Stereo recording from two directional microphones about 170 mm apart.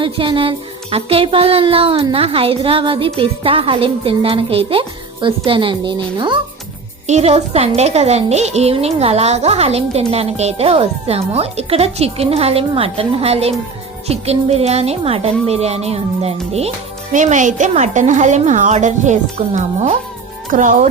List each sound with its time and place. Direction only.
0.0 s speech: 30° right (ahead or behind)
7.1 s speech: 40° right (ahead or behind)